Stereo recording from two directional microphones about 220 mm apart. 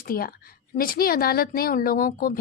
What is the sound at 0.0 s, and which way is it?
Speech, 40° left (ahead or behind).